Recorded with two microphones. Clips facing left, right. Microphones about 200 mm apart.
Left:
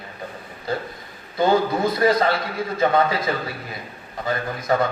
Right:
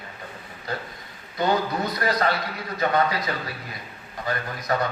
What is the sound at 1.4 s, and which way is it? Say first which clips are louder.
A man's voice: left 5 dB; 25° left (ahead or behind).